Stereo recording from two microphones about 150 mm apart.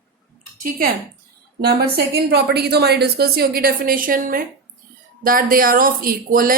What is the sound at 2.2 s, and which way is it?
A woman's voice, 90° right.